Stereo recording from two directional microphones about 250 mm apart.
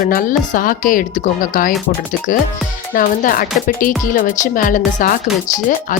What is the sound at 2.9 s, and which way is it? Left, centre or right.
Speech, left.